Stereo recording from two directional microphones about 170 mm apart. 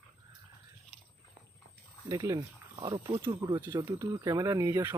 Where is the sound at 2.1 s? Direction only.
25° right (ahead or behind).